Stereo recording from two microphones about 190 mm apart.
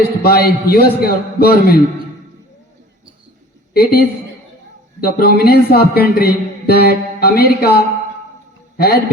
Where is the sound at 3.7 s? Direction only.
55° left (ahead or behind).